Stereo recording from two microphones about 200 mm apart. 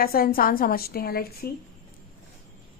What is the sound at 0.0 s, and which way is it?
A woman's voice, 45° left (ahead or behind).